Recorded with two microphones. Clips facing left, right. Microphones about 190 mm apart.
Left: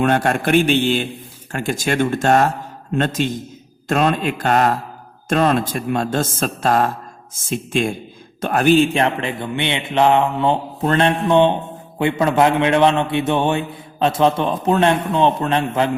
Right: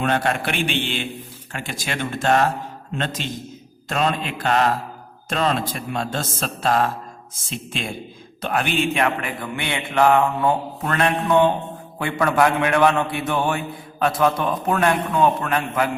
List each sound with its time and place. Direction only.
0.0 s a man's voice: 50° left (ahead or behind); by 15.9 s 25° left (ahead or behind)